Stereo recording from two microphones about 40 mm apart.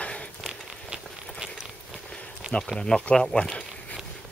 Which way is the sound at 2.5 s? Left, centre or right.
Centre.